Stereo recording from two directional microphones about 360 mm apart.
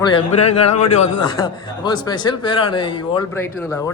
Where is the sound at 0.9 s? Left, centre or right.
Centre.